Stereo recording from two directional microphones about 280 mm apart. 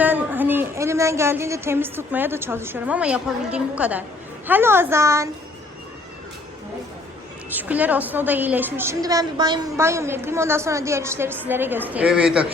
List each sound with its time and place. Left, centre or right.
0.0 s a woman's voice: centre
7.5 s a woman's voice: centre